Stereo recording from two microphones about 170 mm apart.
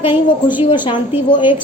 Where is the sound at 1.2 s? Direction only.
30° left (ahead or behind).